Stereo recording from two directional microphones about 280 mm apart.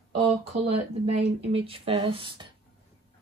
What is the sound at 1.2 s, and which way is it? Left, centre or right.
Speech, centre.